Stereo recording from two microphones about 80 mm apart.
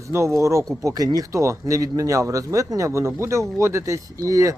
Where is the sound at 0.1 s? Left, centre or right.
Right.